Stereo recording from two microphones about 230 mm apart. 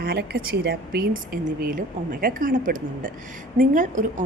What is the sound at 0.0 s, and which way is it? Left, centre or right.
A woman's voice, right.